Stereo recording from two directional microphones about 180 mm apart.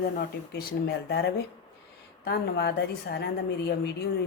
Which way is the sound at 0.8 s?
65° left (ahead or behind).